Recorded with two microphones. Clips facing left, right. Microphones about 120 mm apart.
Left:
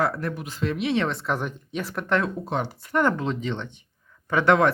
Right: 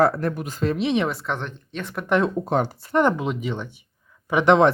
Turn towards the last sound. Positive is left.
turn(degrees=-20)  # may be behind; listen again after turning